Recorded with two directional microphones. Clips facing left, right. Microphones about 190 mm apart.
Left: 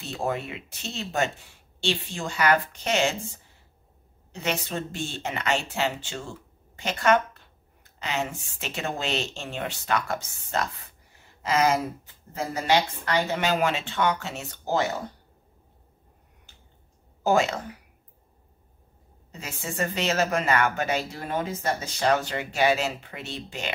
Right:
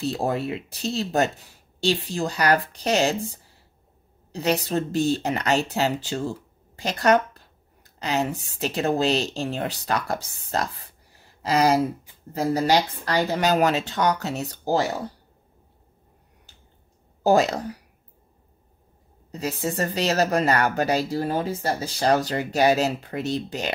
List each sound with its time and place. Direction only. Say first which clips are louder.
0.0 s a woman's voice: right 5 dB; 35° right (ahead or behind)
11.1 s a sound: right 2 dB; 35° right (ahead or behind)
12.3 s speech: right 4 dB; 35° right (ahead or behind)
17.2 s speech: right 4 dB; 35° right (ahead or behind)
19.3 s speech: right 6 dB; 35° right (ahead or behind)